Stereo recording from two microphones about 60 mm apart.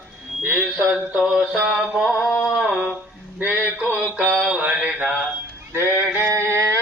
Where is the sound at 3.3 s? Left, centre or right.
Right.